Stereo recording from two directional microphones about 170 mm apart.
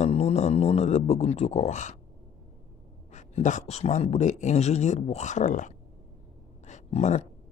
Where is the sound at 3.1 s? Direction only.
45° left (ahead or behind).